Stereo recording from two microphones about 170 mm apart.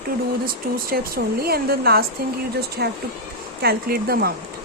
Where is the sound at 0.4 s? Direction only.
60° right (ahead or behind).